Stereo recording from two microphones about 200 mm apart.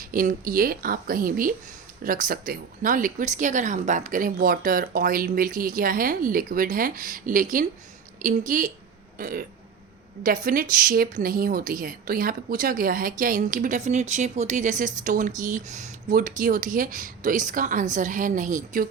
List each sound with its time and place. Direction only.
0.0 s speech: 40° right (ahead or behind)